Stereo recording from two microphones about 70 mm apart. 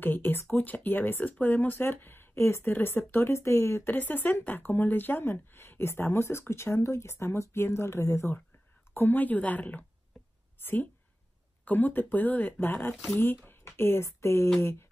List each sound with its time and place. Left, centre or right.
0.0 s speech: left
3.9 s speech: left
8.9 s a woman's voice: left